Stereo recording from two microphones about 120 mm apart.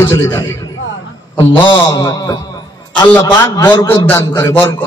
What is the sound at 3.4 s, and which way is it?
Speech, 35° left (ahead or behind).